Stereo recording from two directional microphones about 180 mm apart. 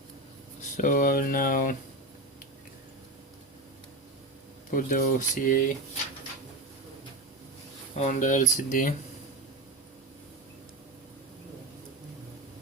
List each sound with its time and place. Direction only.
0.6 s speech: 45° left (ahead or behind)
4.7 s speech: 50° left (ahead or behind)
7.9 s speech: 40° left (ahead or behind)